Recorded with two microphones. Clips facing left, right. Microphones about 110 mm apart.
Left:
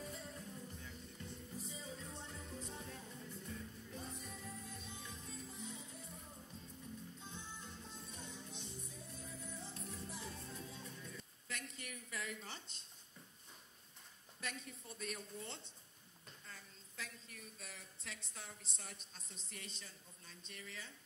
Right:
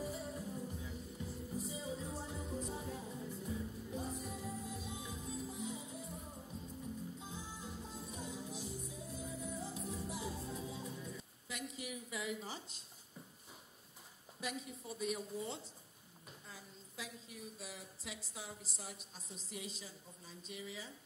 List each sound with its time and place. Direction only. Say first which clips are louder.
0.0 s music: right 7 dB; 5° right (ahead or behind)
6.2 s music: right 5 dB; 20° right (ahead or behind)
6.5 s music: right 7 dB; 5° right (ahead or behind)
14.4 s a woman's voice: right 5 dB; 5° right (ahead or behind)